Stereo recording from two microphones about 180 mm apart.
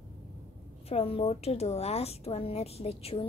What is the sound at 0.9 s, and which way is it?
A woman's voice, 35° left (ahead or behind).